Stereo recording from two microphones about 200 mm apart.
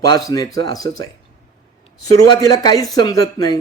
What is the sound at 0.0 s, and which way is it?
A man's voice, 20° left (ahead or behind).